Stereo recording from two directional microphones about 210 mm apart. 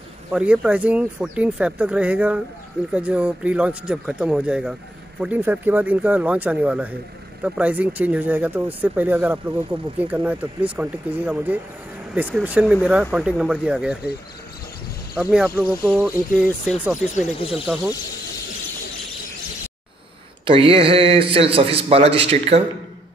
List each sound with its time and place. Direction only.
0.3 s speech: 5° right (ahead or behind)
15.1 s speech: 5° right (ahead or behind)
17.1 s speech: 35° left (ahead or behind)
17.5 s speech: 5° right (ahead or behind)
20.4 s a man's voice: 25° right (ahead or behind)